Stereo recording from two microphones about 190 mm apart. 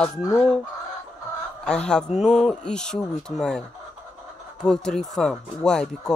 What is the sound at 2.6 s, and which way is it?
Speech, 5° left (ahead or behind).